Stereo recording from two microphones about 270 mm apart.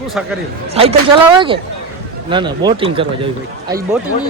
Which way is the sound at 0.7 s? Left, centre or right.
Right.